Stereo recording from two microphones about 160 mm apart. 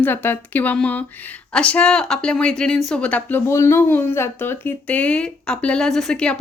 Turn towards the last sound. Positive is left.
turn(degrees=5)  # may be behind; listen again after turning